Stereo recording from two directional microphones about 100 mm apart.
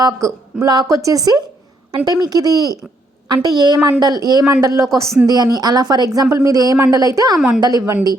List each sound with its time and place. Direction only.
0.0 s a woman's voice: 30° right (ahead or behind)
7.3 s a woman's voice: 5° right (ahead or behind)
7.6 s a woman's voice: 35° right (ahead or behind)